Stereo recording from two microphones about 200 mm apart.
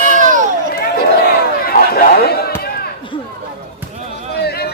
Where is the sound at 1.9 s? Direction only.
50° left (ahead or behind).